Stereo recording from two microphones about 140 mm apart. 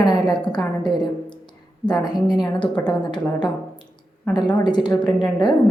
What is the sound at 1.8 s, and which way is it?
A woman's voice, 30° left (ahead or behind).